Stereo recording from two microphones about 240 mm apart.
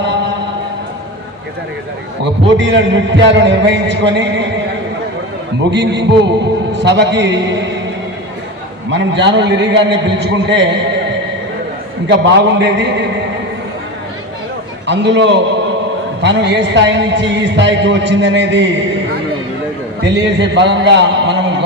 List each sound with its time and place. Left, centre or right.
2.6 s a man's voice: right
5.7 s a man's voice: right
8.9 s a man's voice: right
12.0 s a man's voice: right
14.8 s a man's voice: right
20.1 s a man's voice: right